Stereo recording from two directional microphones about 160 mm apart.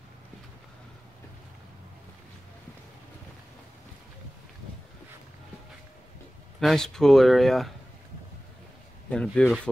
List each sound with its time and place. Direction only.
6.6 s speech: 5° left (ahead or behind)
9.1 s speech: 5° left (ahead or behind)